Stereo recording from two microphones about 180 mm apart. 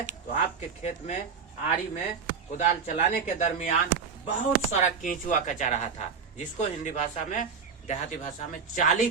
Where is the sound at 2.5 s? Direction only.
40° left (ahead or behind).